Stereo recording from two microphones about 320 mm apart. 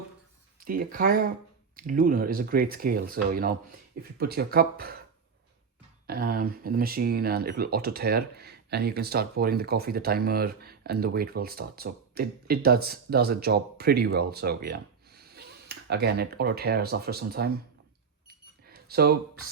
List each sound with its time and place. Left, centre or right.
0.6 s speech: right
6.1 s speech: right
18.7 s a sound: right